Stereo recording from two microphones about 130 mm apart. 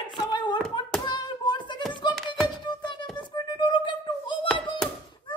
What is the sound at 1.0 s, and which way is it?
Thunk, 35° left (ahead or behind).